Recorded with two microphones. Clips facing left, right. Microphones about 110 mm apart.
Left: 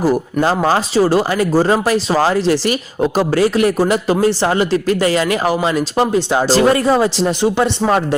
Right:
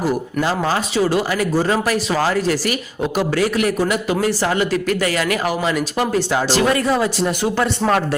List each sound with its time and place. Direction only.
0.0 s a man's voice: 35° left (ahead or behind)